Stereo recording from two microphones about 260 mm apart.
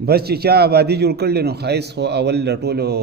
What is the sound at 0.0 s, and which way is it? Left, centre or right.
A man's voice, right.